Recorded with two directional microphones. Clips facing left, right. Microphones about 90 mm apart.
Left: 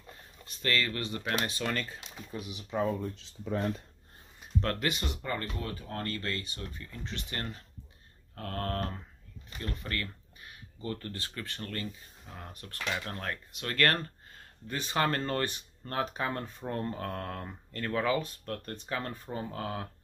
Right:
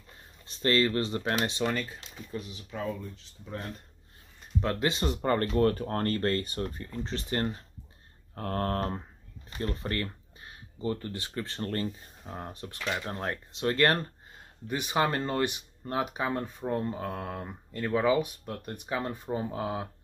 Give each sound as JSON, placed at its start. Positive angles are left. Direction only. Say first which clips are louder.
{"t": 0.5, "sound": "speech", "louder": "right 6 dB", "side_deg": -30}
{"t": 1.7, "sound": "speech", "louder": "right 2 dB", "side_deg": -10}
{"t": 2.0, "sound": "speech", "louder": "right 2 dB", "side_deg": 10}
{"t": 3.2, "sound": "speech", "louder": "left 6 dB", "side_deg": 90}
{"t": 4.6, "sound": "speech", "louder": "right 3 dB", "side_deg": -20}
{"t": 11.4, "sound": "speech", "louder": "right 7 dB", "side_deg": -30}